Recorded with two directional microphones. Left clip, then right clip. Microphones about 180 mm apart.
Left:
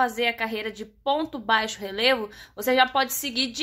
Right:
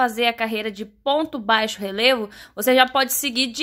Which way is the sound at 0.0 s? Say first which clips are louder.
Right 4 dB; 30° right (ahead or behind).